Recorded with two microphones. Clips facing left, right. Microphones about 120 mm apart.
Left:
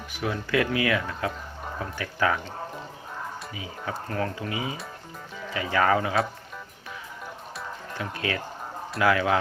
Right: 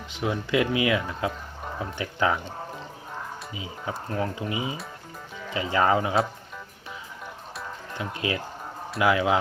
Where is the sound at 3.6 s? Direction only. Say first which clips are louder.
Right 1 dB; 20° right (ahead or behind).